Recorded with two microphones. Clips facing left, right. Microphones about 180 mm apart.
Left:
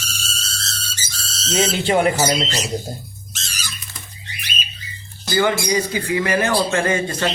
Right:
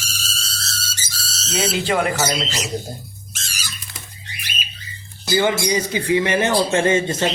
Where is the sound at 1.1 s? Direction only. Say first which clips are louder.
Even; 10° right (ahead or behind).